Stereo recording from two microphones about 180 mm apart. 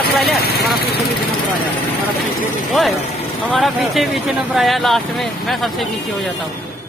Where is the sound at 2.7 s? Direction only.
Centre (ahead or behind).